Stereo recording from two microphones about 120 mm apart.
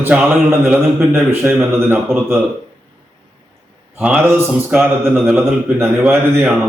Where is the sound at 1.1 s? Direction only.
20° right (ahead or behind).